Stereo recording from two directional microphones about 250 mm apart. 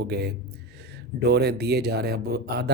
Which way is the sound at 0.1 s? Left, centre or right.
Right.